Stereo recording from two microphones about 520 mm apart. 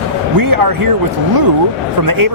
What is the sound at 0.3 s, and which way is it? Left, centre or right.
Speech, right.